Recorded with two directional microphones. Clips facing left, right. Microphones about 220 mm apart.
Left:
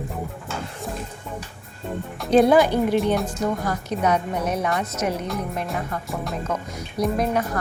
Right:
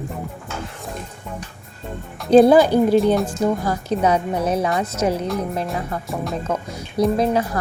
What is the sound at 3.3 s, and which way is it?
A woman's voice, 30° right (ahead or behind).